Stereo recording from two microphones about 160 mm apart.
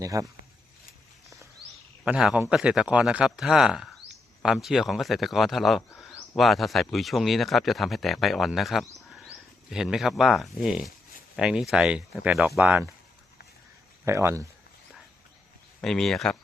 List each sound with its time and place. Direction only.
0.0 s speech: 20° right (ahead or behind)
2.0 s speech: 5° right (ahead or behind)
14.0 s speech: 15° right (ahead or behind)
15.8 s speech: centre (ahead or behind)